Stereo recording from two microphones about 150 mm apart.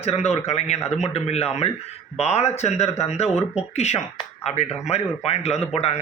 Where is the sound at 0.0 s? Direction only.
45° left (ahead or behind).